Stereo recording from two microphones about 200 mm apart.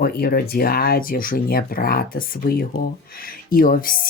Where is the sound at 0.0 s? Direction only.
50° left (ahead or behind).